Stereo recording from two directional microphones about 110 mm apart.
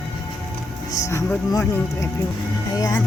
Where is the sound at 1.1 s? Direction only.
25° left (ahead or behind).